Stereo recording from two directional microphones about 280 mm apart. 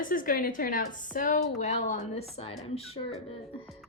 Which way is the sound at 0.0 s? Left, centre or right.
Left.